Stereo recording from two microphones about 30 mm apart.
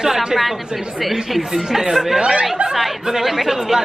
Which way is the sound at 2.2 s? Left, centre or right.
Right.